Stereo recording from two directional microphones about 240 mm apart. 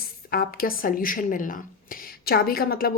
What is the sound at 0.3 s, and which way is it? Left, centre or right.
Speech, left.